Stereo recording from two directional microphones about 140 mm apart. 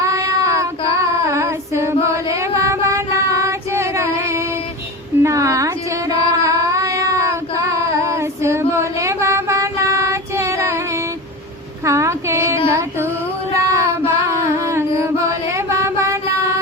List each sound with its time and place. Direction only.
0.0 s child singing: 20° right (ahead or behind)
5.2 s music: 20° right (ahead or behind)
11.9 s a sound: 20° right (ahead or behind)
13.5 s music: 20° right (ahead or behind)